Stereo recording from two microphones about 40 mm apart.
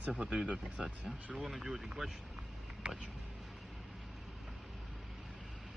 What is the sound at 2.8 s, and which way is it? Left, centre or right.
Speech, right.